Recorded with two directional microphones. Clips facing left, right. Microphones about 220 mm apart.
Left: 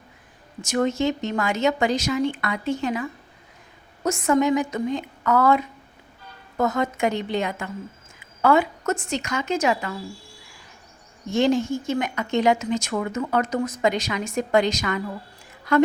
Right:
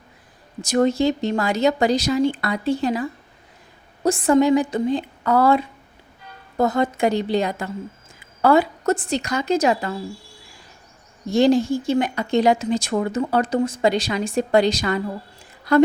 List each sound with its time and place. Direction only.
0.6 s speech: 35° right (ahead or behind)
11.3 s speech: 35° right (ahead or behind)